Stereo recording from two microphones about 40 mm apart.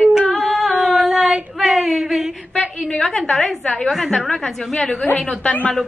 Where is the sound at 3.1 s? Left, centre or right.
Centre.